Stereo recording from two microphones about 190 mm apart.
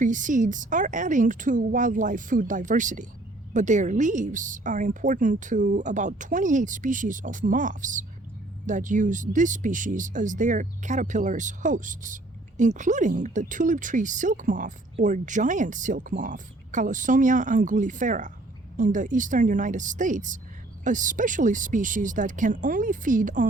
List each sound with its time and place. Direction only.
0.0 s speech: 40° right (ahead or behind)